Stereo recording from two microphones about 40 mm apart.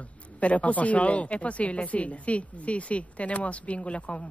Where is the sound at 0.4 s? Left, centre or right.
Left.